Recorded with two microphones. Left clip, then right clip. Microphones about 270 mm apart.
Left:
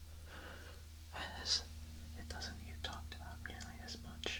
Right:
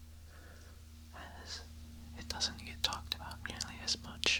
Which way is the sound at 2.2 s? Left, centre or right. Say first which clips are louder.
Right 11 dB; centre.